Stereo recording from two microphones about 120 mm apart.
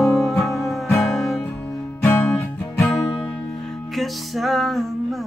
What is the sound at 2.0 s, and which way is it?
Music, 15° left (ahead or behind).